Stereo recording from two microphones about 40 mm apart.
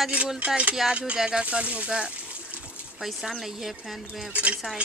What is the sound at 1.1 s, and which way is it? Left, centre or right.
Speech, centre.